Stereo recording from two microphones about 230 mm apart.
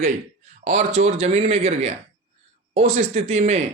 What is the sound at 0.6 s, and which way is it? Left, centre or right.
Speech, right.